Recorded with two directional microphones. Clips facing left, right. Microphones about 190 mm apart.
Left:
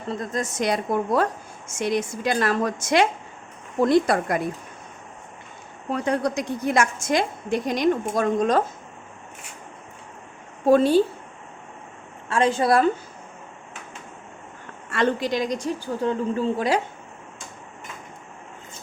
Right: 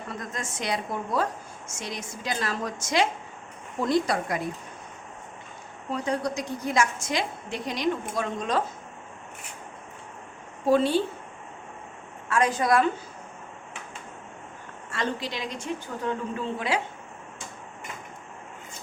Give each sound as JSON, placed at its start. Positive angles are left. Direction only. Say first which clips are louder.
{"t": 0.1, "sound": "a woman's voice", "louder": "left 10 dB", "side_deg": 35}
{"t": 1.8, "sound": "a woman's voice", "louder": "left 12 dB", "side_deg": 60}
{"t": 5.9, "sound": "a woman's voice", "louder": "left 4 dB", "side_deg": 60}
{"t": 10.7, "sound": "a woman's voice", "louder": "left 5 dB", "side_deg": 45}
{"t": 12.3, "sound": "a woman's voice", "louder": "left 3 dB", "side_deg": 25}
{"t": 14.8, "sound": "a woman's voice", "louder": "left 8 dB", "side_deg": 65}
{"t": 15.3, "sound": "a woman's voice", "louder": "left 8 dB", "side_deg": 40}